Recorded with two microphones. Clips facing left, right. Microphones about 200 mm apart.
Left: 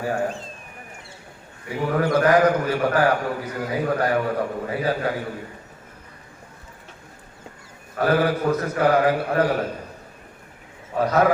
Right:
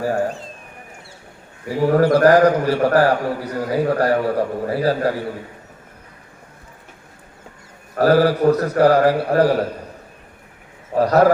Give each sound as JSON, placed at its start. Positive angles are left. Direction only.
{"t": 1.6, "sound": "a man's voice", "side_deg": -35}
{"t": 7.9, "sound": "a man's voice", "side_deg": -35}
{"t": 10.9, "sound": "a man's voice", "side_deg": -35}